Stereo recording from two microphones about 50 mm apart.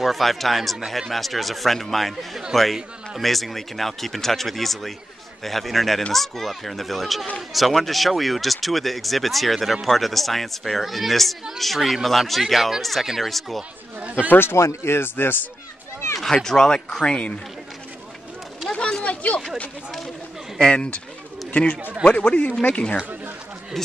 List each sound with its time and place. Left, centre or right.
0.0 s speech: centre
14.3 s speech: left
14.6 s speech: left
16.4 s speech: centre
18.7 s a sound: centre
20.7 s a man's voice: left